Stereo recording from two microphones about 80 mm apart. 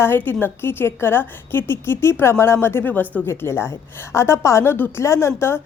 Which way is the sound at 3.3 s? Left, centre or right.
Left.